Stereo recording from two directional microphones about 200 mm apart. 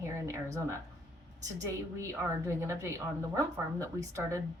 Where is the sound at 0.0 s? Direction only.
15° right (ahead or behind).